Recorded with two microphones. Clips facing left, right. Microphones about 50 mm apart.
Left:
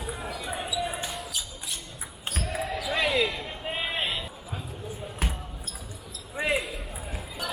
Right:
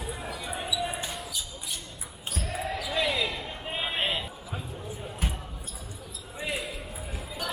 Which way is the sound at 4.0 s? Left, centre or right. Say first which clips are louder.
Right 1 dB; right.